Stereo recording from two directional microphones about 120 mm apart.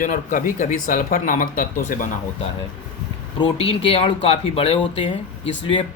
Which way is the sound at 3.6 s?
55° left (ahead or behind).